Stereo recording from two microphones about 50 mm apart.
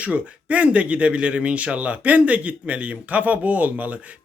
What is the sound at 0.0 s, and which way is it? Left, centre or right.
Speech, right.